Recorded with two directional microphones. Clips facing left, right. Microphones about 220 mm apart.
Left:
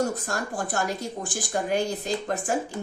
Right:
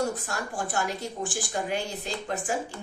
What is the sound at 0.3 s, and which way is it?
A woman's voice, 45° left (ahead or behind).